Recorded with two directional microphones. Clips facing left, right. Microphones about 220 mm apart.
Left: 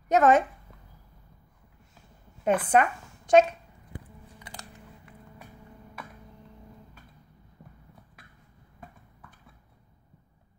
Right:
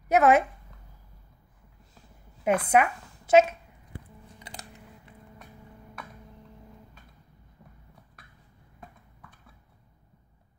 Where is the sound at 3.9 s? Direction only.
20° right (ahead or behind).